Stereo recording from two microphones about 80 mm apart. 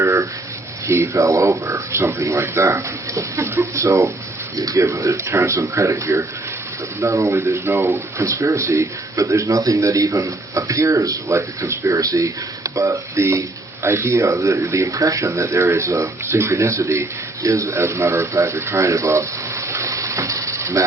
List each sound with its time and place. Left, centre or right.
0.0 s speech: right